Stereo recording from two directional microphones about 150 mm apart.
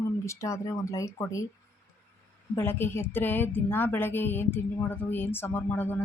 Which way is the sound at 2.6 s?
15° left (ahead or behind).